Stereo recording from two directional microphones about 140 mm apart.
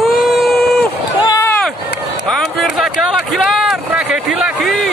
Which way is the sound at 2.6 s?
Centre (ahead or behind).